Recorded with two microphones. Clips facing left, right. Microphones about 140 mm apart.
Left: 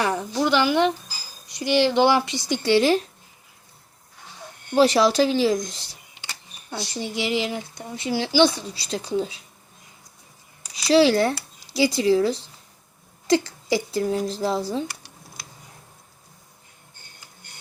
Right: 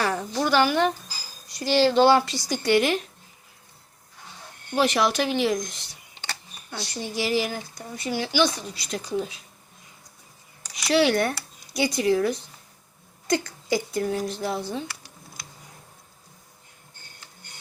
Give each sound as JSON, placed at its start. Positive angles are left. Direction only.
{"t": 0.0, "sound": "a woman's voice", "side_deg": 20}
{"t": 4.7, "sound": "speech", "side_deg": 35}
{"t": 6.9, "sound": "speech", "side_deg": 20}
{"t": 10.8, "sound": "speech", "side_deg": 30}
{"t": 13.2, "sound": "a sound", "side_deg": 25}
{"t": 13.9, "sound": "speech", "side_deg": 30}